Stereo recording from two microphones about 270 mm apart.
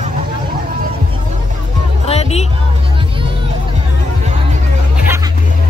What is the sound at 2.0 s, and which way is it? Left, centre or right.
Music, left.